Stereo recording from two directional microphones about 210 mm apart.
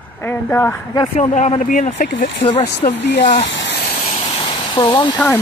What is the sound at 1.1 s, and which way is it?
Speech, 35° left (ahead or behind).